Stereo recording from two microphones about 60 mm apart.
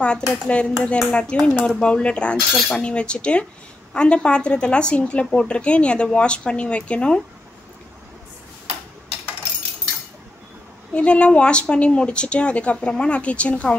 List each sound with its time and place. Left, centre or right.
0.0 s speech: centre
10.9 s speech: centre